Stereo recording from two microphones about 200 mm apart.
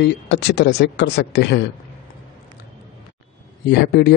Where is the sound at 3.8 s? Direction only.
55° left (ahead or behind).